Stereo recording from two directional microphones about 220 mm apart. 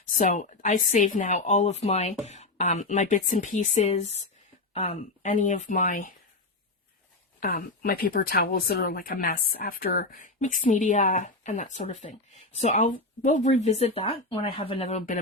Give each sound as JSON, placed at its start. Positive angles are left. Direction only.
{"t": 0.2, "sound": "speech", "side_deg": 35}
{"t": 7.3, "sound": "speech", "side_deg": 40}